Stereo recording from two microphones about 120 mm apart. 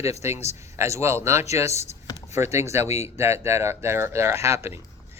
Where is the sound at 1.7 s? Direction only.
65° left (ahead or behind).